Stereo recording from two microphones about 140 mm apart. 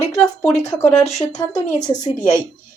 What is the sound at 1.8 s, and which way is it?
Speech, 30° left (ahead or behind).